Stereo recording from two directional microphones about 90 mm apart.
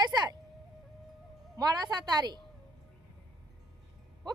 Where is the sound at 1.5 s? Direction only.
45° right (ahead or behind).